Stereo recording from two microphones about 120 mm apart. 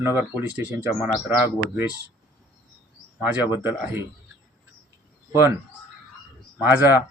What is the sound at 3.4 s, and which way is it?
Speech, 15° right (ahead or behind).